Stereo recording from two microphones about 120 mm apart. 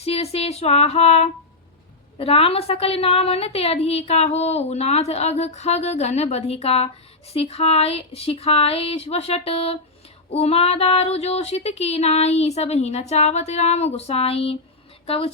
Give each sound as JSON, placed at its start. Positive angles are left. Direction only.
{"t": 0.0, "sound": "a woman's voice", "side_deg": 60}